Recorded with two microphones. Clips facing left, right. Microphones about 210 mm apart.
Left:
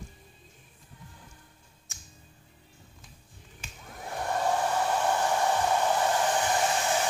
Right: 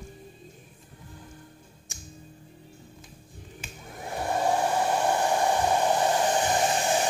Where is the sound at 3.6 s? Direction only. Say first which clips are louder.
Right 3 dB; 5° right (ahead or behind).